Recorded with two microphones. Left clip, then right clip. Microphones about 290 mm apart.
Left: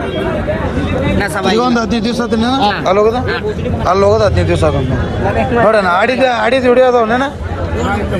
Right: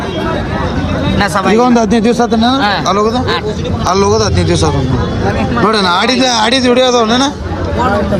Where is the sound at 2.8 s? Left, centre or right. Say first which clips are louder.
Left 1 dB; centre.